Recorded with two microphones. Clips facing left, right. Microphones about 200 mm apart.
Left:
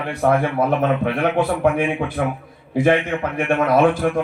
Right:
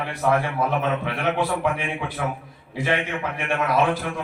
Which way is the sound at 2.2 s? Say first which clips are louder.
Left 5 dB; 45° left (ahead or behind).